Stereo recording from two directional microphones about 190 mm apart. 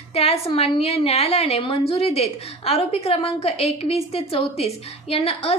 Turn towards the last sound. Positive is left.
turn(degrees=30)  # may be behind; listen again after turning